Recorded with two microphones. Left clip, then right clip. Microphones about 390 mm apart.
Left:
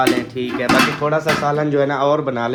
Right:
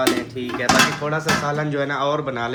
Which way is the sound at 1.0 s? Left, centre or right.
Left.